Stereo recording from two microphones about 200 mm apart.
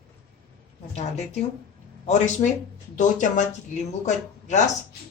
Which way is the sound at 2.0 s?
35° left (ahead or behind).